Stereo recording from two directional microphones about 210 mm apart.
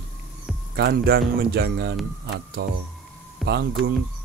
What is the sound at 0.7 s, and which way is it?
Speech, 50° right (ahead or behind).